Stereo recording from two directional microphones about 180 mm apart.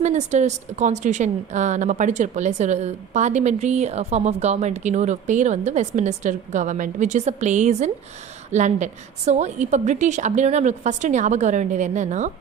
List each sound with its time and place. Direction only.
0.0 s a woman's voice: 40° right (ahead or behind)